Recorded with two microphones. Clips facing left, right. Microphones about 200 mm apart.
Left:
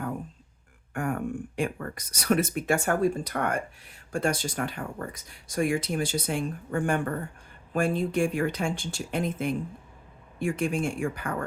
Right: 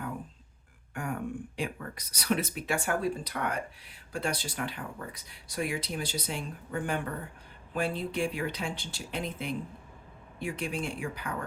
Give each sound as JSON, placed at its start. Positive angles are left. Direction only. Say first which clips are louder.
{"t": 0.9, "sound": "speech", "louder": "left 5 dB", "side_deg": 50}